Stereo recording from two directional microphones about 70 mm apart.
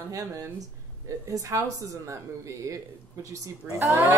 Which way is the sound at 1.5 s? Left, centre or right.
Right.